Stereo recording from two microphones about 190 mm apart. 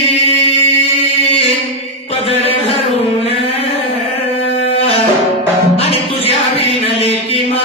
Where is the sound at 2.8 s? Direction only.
30° left (ahead or behind).